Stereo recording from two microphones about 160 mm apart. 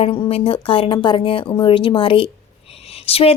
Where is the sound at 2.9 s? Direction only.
35° left (ahead or behind).